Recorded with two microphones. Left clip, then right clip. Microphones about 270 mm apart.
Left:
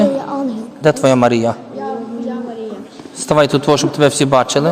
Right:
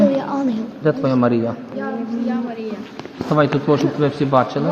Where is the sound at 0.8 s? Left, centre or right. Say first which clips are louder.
Left 7 dB; left.